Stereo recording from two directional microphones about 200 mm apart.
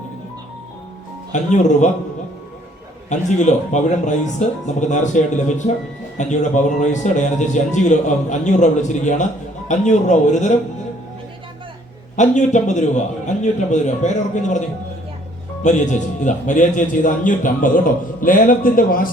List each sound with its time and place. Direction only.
1.3 s a man's voice: 35° left (ahead or behind)
3.1 s a man's voice: 35° left (ahead or behind)
12.1 s a man's voice: 35° left (ahead or behind)
15.6 s a man's voice: 40° left (ahead or behind)